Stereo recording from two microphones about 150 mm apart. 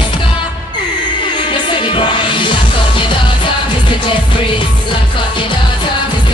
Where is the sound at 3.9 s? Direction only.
35° left (ahead or behind).